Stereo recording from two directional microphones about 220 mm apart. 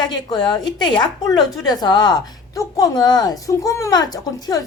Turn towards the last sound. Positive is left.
turn(degrees=15)  # may be behind; listen again after turning